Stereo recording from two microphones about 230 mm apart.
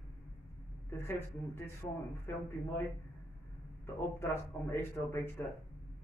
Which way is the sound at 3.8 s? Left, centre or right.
Centre.